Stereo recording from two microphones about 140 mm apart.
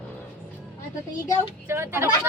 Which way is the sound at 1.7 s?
15° right (ahead or behind).